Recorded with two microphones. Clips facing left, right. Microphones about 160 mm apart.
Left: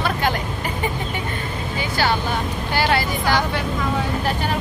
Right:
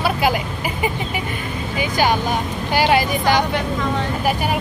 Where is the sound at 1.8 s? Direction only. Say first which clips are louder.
Right 3 dB; 15° right (ahead or behind).